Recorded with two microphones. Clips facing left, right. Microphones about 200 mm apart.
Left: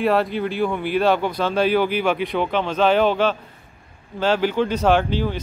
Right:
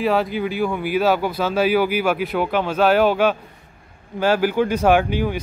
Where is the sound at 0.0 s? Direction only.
Centre (ahead or behind).